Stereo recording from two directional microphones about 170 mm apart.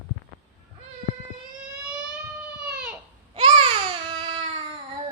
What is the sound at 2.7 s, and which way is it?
Baby cry, 10° right (ahead or behind).